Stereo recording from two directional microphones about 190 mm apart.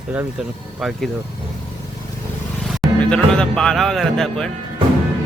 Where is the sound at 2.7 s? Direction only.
Centre (ahead or behind).